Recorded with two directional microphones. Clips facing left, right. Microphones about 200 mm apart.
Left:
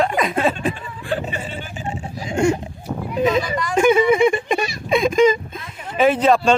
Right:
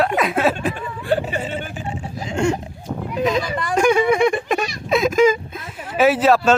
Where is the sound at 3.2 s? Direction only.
Centre (ahead or behind).